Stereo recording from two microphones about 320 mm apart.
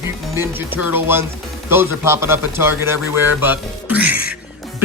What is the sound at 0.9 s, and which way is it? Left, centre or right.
Speech, centre.